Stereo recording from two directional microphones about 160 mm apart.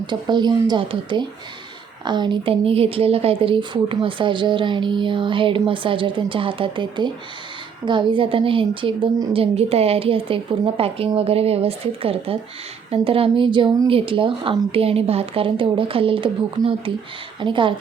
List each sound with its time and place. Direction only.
0.1 s speech: 30° right (ahead or behind)